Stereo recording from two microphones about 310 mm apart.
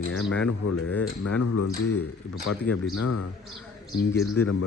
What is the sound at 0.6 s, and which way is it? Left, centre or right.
Speech, left.